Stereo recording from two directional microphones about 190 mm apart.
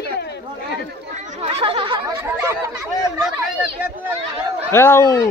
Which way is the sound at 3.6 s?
5° right (ahead or behind).